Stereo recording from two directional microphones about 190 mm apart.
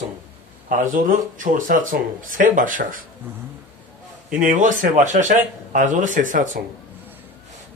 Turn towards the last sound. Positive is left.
turn(degrees=-45)  # may be behind; listen again after turning